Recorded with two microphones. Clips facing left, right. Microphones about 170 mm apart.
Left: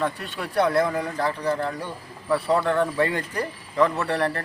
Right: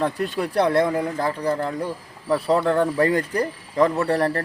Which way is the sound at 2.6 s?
5° right (ahead or behind).